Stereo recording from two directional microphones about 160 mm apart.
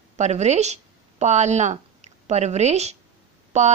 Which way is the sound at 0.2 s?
45° right (ahead or behind).